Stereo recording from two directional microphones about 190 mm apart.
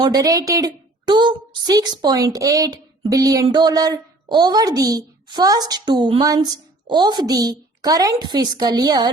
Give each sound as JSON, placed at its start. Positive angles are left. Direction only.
{"t": 0.0, "sound": "a woman's voice", "side_deg": -20}